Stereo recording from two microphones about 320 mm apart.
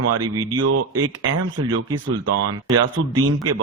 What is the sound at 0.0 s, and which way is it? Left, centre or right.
Speech, right.